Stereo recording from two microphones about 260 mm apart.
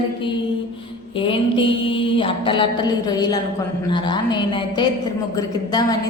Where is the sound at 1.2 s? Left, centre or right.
Centre.